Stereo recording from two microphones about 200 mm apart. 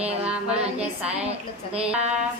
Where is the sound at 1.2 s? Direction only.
30° right (ahead or behind).